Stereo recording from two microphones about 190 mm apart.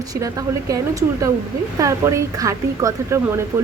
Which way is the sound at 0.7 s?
15° right (ahead or behind).